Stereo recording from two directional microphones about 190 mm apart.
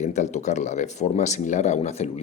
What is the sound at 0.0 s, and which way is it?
Speech, 35° left (ahead or behind).